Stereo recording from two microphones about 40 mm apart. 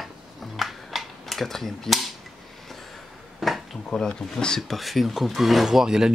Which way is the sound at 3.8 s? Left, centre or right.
Left.